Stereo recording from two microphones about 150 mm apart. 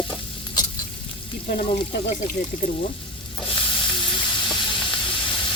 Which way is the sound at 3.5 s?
35° left (ahead or behind).